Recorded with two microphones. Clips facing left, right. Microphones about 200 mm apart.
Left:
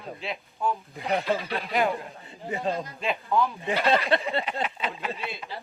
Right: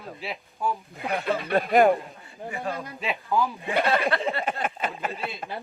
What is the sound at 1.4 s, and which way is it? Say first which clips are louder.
Speech: right 7 dB; 50° right (ahead or behind).